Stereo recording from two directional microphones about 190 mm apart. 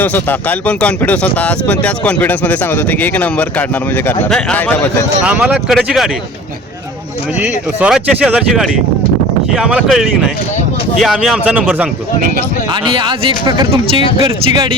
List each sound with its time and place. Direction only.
0.0 s speech: 10° left (ahead or behind)
5.2 s speech: 5° right (ahead or behind)
7.4 s speech: 5° right (ahead or behind)
12.8 s speech: 25° right (ahead or behind)